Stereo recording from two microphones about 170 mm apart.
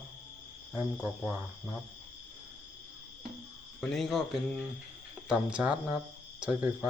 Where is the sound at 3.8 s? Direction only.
Centre (ahead or behind).